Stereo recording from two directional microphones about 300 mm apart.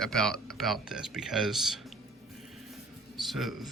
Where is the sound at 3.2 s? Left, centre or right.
Centre.